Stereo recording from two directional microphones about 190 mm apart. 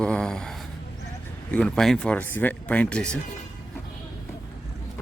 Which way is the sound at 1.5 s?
5° left (ahead or behind).